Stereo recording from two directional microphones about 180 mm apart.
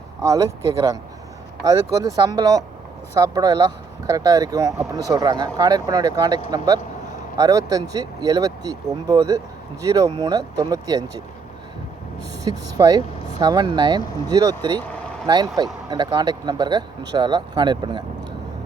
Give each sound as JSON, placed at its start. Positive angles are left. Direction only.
{"t": 0.2, "sound": "speech", "side_deg": -20}
{"t": 1.6, "sound": "speech", "side_deg": -20}
{"t": 12.5, "sound": "speech", "side_deg": -20}